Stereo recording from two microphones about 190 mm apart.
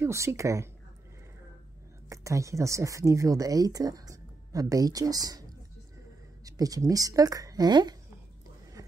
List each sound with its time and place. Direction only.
0.0 s a woman's voice: 15° right (ahead or behind)
2.0 s speech: 15° right (ahead or behind)
6.4 s speech: 20° right (ahead or behind)